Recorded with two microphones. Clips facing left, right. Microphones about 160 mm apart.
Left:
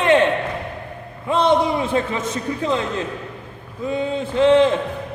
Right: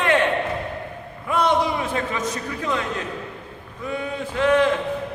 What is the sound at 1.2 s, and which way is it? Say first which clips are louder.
A man's voice: left 3 dB; 25° left (ahead or behind).